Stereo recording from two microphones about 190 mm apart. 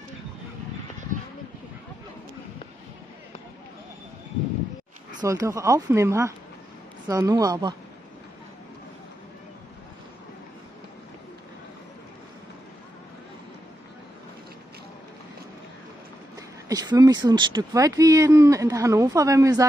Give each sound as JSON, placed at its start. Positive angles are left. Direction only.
{"t": 5.2, "sound": "speech", "side_deg": -15}
{"t": 16.6, "sound": "speech", "side_deg": -20}